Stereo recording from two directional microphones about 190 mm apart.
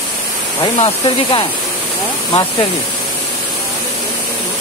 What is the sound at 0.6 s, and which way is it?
Speech, 25° left (ahead or behind).